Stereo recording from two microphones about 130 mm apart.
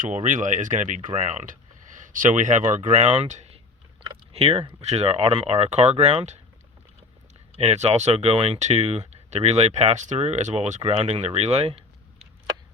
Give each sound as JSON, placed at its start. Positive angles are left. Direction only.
{"t": 0.0, "sound": "speech", "side_deg": -70}
{"t": 4.0, "sound": "speech", "side_deg": -50}
{"t": 7.5, "sound": "speech", "side_deg": -55}